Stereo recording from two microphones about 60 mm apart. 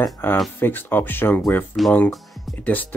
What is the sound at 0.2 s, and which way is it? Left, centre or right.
Speech, left.